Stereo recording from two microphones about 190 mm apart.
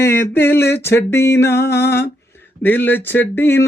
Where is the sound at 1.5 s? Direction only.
60° left (ahead or behind).